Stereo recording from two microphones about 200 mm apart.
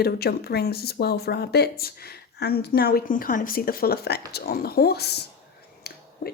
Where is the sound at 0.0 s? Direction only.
55° left (ahead or behind).